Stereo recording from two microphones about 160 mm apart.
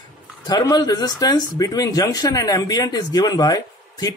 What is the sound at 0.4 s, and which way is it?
Speech, 25° left (ahead or behind).